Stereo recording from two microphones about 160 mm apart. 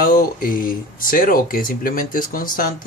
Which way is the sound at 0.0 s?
60° left (ahead or behind).